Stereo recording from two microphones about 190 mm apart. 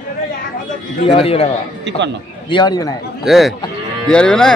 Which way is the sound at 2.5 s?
20° left (ahead or behind).